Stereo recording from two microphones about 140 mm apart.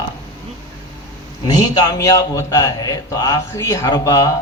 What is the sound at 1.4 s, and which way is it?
A man's voice, 30° left (ahead or behind).